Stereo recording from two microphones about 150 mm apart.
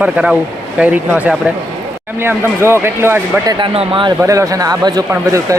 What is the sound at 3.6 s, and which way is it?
Speech, 35° right (ahead or behind).